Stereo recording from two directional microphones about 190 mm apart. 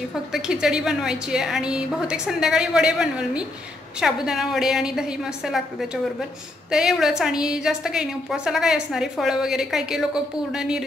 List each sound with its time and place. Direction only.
0.3 s a woman's voice: 5° right (ahead or behind)